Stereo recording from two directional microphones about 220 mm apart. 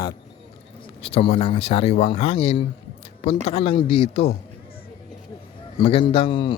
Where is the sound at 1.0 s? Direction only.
25° left (ahead or behind).